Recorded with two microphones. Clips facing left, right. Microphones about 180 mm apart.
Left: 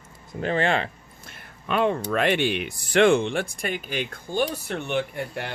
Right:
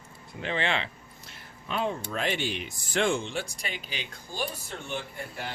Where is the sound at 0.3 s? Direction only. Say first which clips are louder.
Left 6 dB; 45° left (ahead or behind).